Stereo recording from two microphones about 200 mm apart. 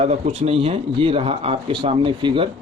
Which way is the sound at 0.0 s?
30° right (ahead or behind).